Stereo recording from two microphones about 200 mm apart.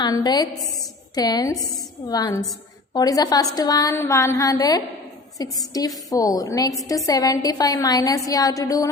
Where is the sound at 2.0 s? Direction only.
20° left (ahead or behind).